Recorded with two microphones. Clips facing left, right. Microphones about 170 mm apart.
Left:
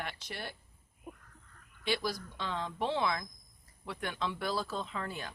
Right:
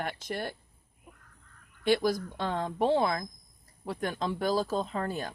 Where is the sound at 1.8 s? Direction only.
50° right (ahead or behind).